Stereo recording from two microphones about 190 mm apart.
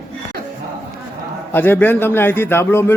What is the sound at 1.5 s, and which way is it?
A man's voice, 10° left (ahead or behind).